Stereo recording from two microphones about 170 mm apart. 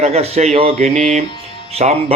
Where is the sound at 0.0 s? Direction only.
40° right (ahead or behind).